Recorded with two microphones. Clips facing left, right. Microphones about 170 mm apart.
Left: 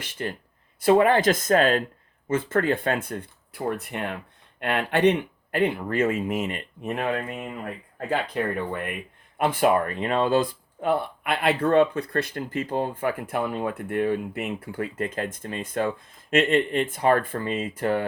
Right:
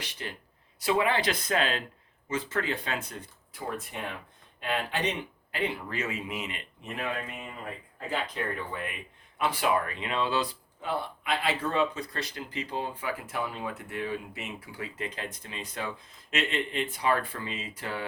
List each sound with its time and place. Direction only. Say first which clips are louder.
0.0 s speech: left 8 dB; 50° left (ahead or behind)